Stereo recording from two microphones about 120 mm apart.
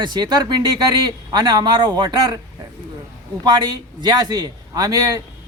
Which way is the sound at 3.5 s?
35° right (ahead or behind).